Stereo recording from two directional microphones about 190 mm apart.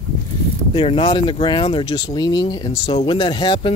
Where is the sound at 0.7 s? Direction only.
30° left (ahead or behind).